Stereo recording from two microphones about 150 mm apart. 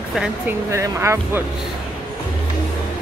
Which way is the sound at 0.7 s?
20° right (ahead or behind).